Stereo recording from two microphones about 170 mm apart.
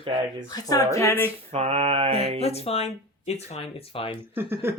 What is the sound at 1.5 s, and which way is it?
Mantra, 40° right (ahead or behind).